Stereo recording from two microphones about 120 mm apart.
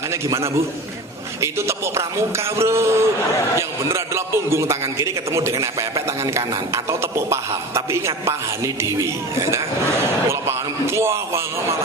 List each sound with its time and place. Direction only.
0.1 s a man's voice: 25° right (ahead or behind)